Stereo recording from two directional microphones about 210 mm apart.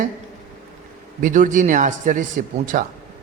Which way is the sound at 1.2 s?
35° right (ahead or behind).